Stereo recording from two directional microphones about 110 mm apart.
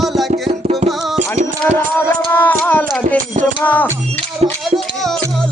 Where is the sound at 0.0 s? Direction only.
Centre (ahead or behind).